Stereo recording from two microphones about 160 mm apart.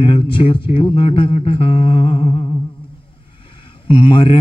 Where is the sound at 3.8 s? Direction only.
30° left (ahead or behind).